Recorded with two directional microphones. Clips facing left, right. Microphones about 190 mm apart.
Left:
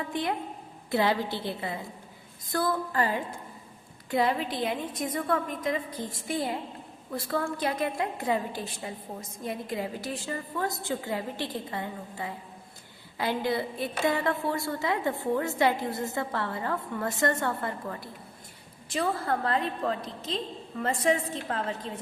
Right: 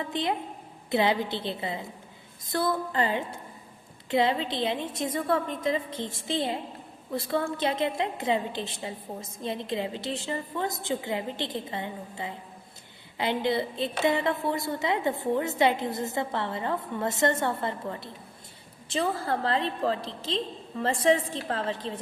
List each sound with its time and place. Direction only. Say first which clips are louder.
0.1 s a woman's voice: right 1 dB; 20° right (ahead or behind)